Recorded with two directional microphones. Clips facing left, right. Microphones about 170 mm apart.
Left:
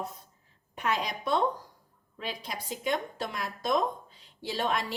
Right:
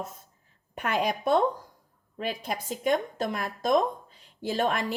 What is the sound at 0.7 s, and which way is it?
A woman's voice, 55° right (ahead or behind).